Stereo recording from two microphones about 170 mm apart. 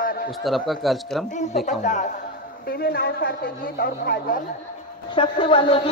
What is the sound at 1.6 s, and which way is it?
Speech, 45° left (ahead or behind).